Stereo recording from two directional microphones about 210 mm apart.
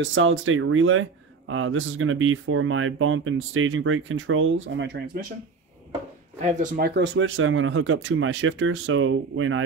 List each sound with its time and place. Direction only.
0.0 s speech: 65° right (ahead or behind)
6.4 s speech: 40° right (ahead or behind)
7.0 s speech: 60° right (ahead or behind)